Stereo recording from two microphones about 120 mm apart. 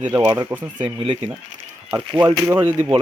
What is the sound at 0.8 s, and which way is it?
Speech, 45° right (ahead or behind).